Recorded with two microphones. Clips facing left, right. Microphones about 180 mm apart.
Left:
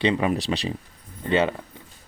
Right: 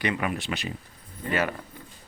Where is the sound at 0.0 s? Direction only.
25° left (ahead or behind).